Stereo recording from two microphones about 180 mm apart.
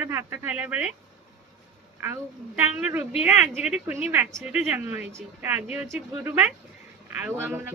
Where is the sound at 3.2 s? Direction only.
10° right (ahead or behind).